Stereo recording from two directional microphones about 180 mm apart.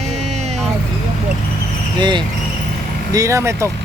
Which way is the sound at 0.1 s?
40° right (ahead or behind).